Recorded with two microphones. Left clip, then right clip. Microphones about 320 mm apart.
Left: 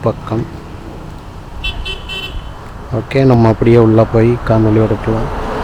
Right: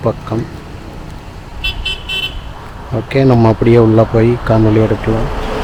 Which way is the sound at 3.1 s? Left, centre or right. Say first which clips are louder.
Even; centre.